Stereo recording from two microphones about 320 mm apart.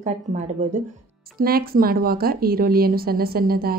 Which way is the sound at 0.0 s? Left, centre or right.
Right.